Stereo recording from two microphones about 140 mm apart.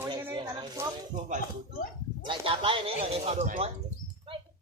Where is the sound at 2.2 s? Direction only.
40° right (ahead or behind).